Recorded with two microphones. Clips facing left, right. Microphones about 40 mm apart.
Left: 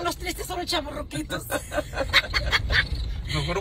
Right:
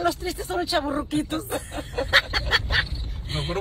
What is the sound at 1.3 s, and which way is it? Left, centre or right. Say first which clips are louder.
Speech: left 1 dB; left.